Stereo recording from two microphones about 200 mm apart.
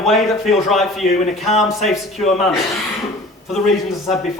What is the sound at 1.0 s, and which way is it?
Speech, 45° left (ahead or behind).